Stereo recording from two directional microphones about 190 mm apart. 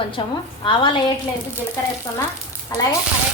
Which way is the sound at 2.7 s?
20° left (ahead or behind).